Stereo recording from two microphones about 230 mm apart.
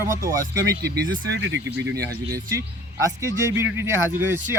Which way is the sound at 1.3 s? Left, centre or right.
Right.